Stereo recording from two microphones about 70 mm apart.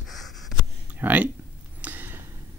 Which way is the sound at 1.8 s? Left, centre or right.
Right.